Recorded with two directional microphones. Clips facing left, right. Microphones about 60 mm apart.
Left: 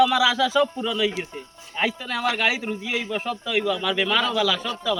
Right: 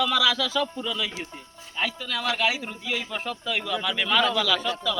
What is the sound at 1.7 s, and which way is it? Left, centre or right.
Speech, left.